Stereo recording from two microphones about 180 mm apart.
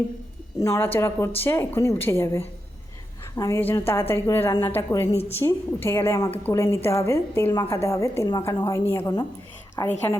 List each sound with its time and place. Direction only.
0.6 s a woman's voice: 20° left (ahead or behind)